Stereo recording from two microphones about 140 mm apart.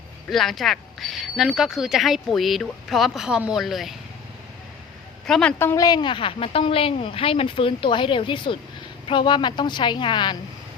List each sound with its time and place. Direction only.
0.3 s speech: centre (ahead or behind)
5.2 s a woman's voice: 5° left (ahead or behind)
5.5 s a woman's voice: 15° left (ahead or behind)
5.8 s a woman's voice: 30° left (ahead or behind)